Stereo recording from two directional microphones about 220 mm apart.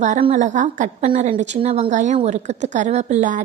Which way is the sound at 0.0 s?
30° right (ahead or behind).